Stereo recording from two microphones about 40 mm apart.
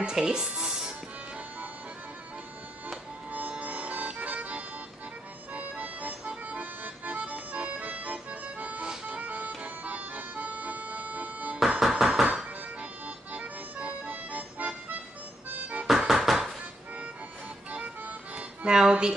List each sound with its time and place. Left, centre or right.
0.0 s music: centre
3.3 s music: right
5.5 s accordion: right
9.0 s music: right
11.9 s music: right
13.0 s accordion: right
15.5 s music: right
15.9 s music: centre
17.6 s music: right
18.7 s music: right